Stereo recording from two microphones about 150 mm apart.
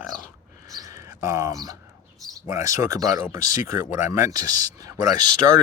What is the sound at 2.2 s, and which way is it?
Speech, 20° right (ahead or behind).